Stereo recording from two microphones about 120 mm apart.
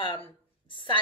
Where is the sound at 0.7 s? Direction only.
45° left (ahead or behind).